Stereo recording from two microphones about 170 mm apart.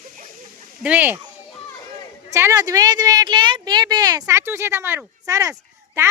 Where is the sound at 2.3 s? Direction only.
20° right (ahead or behind).